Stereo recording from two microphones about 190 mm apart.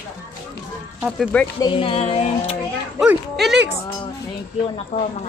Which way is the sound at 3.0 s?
Centre (ahead or behind).